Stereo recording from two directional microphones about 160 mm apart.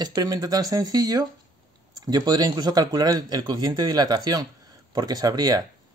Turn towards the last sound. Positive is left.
turn(degrees=-25)  # may be behind; listen again after turning